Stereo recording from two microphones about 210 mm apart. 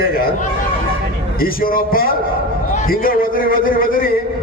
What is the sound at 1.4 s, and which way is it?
A man's voice, 45° left (ahead or behind).